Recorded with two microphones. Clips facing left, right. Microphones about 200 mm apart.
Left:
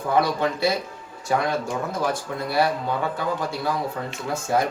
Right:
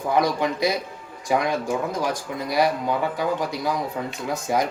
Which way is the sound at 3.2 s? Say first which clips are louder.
Right 2 dB; 15° right (ahead or behind).